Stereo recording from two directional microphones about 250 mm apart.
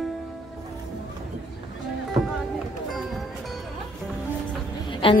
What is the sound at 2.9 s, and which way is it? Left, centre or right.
Music, centre.